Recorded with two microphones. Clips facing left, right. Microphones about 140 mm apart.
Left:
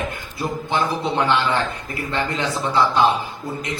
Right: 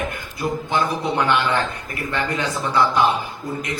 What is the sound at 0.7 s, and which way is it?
A man's voice, 25° left (ahead or behind).